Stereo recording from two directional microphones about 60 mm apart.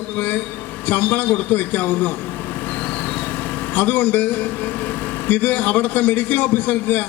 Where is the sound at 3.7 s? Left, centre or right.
Left.